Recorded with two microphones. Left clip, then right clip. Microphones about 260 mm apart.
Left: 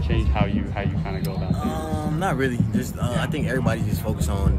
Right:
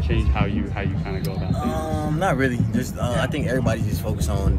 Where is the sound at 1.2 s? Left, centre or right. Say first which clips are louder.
Right 2 dB; centre.